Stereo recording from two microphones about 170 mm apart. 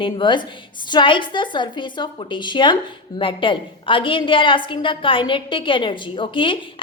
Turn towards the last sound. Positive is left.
turn(degrees=30)  # may be behind; listen again after turning